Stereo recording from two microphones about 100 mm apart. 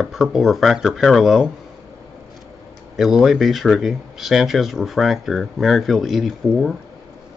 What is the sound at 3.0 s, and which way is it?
Speech, 5° right (ahead or behind).